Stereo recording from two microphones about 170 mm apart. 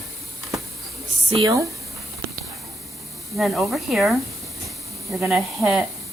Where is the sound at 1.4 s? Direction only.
20° right (ahead or behind).